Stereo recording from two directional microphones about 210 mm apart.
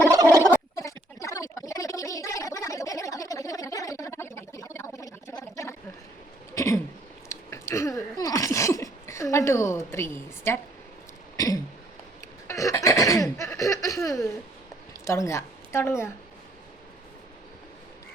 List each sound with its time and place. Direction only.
0.8 s gargling: 15° left (ahead or behind)
6.5 s throat clearing: 15° left (ahead or behind)
7.3 s sneeze: 15° left (ahead or behind)
11.3 s throat clearing: 15° left (ahead or behind)
12.5 s a sound: 15° left (ahead or behind)